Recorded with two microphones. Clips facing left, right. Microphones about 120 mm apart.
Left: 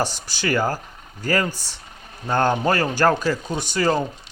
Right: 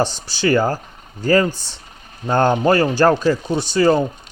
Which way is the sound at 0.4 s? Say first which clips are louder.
Right 5 dB; 25° right (ahead or behind).